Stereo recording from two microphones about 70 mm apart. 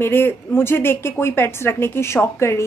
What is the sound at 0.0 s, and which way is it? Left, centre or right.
A woman's voice, left.